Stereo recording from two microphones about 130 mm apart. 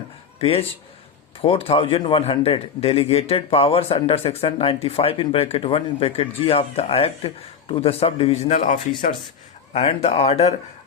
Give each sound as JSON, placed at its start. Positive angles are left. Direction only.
{"t": 0.3, "sound": "a man's voice", "side_deg": 45}
{"t": 9.7, "sound": "a man's voice", "side_deg": 55}